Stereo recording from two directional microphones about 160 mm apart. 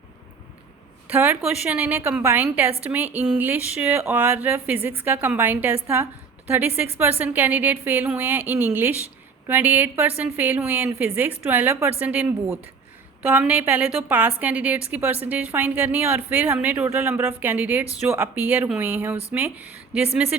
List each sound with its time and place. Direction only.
1.0 s speech: 10° right (ahead or behind)